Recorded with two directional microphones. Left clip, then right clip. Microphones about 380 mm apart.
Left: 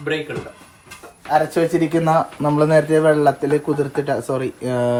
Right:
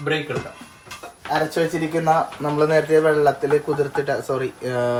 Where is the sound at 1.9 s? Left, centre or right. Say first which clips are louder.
Left 2 dB; left.